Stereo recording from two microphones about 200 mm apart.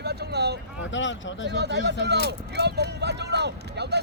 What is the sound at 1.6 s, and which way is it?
Speech, 60° right (ahead or behind).